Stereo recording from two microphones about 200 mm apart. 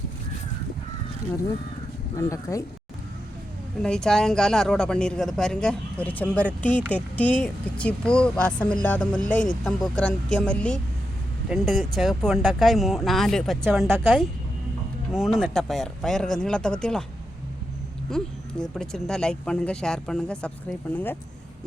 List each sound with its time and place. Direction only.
2.1 s speech: 15° left (ahead or behind)
3.8 s speech: 5° left (ahead or behind)
13.8 s a woman's voice: 10° right (ahead or behind)
15.1 s speech: centre (ahead or behind)
18.1 s speech: centre (ahead or behind)